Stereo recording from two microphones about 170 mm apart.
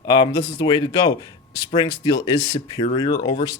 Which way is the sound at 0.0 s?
25° left (ahead or behind).